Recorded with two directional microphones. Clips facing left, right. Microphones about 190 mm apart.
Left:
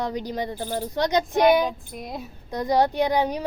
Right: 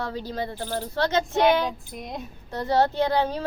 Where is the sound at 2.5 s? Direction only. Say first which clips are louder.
Left 1 dB; 15° left (ahead or behind).